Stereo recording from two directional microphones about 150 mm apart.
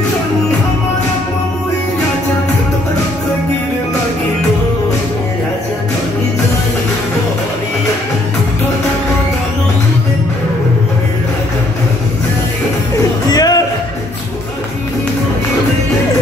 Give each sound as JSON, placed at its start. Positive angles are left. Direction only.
{"t": 12.9, "sound": "music", "side_deg": 25}